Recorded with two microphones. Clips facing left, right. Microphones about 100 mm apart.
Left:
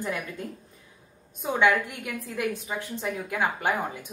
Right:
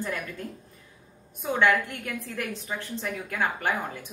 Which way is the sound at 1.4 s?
15° left (ahead or behind).